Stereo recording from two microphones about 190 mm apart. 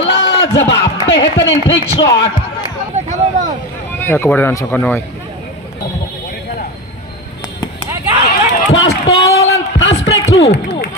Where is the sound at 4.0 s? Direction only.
10° left (ahead or behind).